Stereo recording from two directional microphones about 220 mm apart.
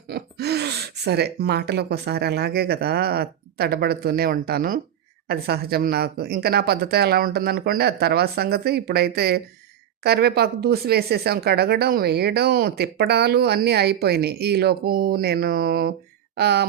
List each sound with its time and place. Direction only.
0.1 s speech: 45° right (ahead or behind)